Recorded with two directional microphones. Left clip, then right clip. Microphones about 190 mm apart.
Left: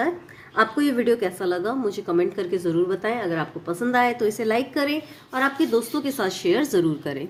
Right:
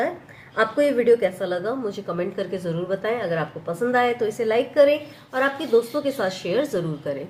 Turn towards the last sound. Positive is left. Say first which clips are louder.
# left 3 dB
turn(degrees=50)  # may be behind; listen again after turning